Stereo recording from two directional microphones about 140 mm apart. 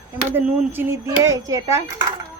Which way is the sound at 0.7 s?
15° right (ahead or behind).